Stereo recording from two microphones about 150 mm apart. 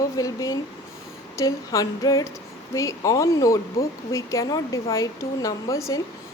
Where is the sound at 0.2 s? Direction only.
20° left (ahead or behind).